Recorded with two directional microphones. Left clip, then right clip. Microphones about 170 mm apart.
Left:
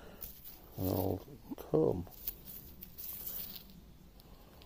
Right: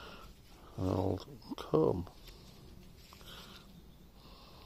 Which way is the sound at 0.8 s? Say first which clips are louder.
Right 1 dB; 30° right (ahead or behind).